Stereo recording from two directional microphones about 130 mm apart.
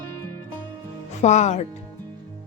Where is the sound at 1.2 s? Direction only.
60° left (ahead or behind).